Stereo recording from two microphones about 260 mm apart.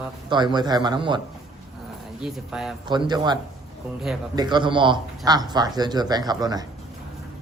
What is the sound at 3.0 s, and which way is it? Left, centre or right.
Speech, centre.